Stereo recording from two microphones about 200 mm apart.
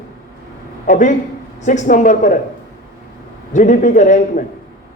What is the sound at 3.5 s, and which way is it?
Speech, 40° left (ahead or behind).